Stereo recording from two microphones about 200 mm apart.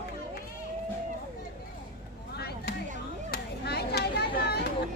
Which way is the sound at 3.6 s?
55° left (ahead or behind).